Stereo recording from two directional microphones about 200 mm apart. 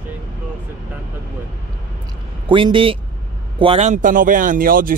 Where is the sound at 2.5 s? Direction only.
25° right (ahead or behind); by 4.9 s 45° right (ahead or behind).